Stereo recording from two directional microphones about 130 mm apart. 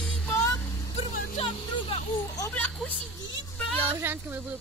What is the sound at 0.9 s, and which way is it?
Vehicle, 55° left (ahead or behind).